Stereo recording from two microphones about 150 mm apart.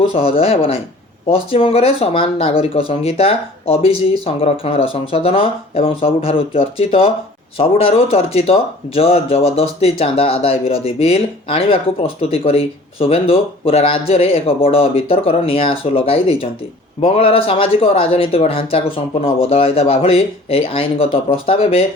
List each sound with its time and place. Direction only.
0.1 s speech: 40° left (ahead or behind)